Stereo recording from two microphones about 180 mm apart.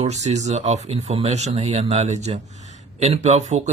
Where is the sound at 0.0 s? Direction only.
40° right (ahead or behind).